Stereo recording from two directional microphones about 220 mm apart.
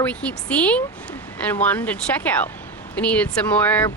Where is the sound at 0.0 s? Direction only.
5° left (ahead or behind).